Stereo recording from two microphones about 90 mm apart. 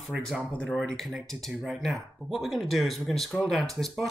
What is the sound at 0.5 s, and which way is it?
Speech, 10° left (ahead or behind).